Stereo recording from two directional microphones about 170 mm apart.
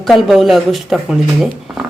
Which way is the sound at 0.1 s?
Centre (ahead or behind).